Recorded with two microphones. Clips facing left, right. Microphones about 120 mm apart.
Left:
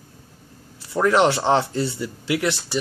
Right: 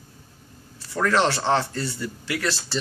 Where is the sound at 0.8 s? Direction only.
20° left (ahead or behind).